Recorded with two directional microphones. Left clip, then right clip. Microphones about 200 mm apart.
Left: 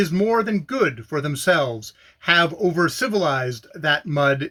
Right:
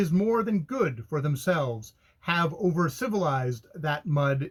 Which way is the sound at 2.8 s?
15° left (ahead or behind).